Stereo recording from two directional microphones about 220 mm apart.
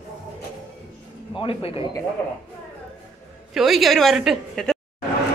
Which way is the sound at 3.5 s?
Centre (ahead or behind).